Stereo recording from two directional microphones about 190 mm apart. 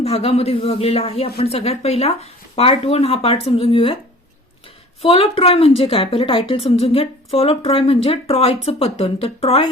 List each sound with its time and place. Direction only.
0.0 s a woman's voice: 35° left (ahead or behind)
5.0 s a woman's voice: 30° left (ahead or behind)